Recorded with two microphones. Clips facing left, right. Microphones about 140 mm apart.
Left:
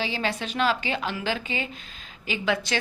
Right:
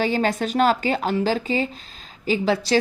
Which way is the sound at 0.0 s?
45° right (ahead or behind).